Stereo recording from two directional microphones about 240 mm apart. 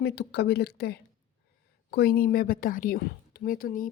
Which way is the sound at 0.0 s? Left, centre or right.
Left.